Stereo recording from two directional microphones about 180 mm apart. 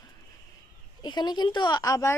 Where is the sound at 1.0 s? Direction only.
25° left (ahead or behind).